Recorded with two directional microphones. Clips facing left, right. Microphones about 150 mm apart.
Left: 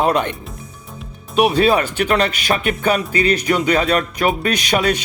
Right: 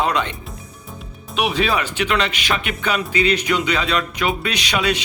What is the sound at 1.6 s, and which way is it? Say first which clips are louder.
Speech: left 5 dB; 50° left (ahead or behind).